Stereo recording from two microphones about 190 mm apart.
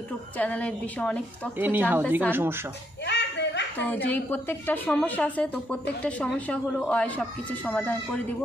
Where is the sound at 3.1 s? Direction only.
65° left (ahead or behind).